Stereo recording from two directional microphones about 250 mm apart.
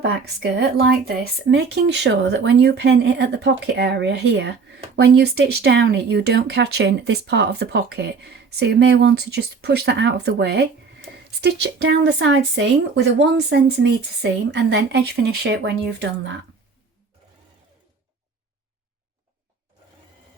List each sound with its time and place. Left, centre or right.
0.0 s speech: right